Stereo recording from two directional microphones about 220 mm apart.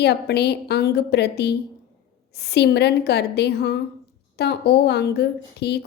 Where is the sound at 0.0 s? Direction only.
50° left (ahead or behind).